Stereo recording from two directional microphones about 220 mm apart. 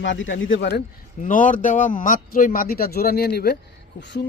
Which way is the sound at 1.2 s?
35° left (ahead or behind).